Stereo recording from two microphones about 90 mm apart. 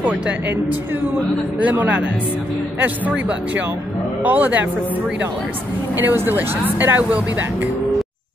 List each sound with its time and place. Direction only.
1.6 s speech: 15° right (ahead or behind)
4.2 s speech: 20° right (ahead or behind)
5.9 s speech: 25° right (ahead or behind)